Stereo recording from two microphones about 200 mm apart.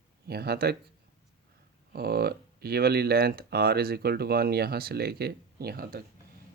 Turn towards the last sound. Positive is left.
turn(degrees=-50)  # may be behind; listen again after turning